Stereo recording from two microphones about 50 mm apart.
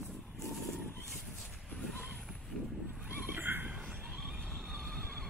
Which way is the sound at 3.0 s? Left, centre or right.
Right.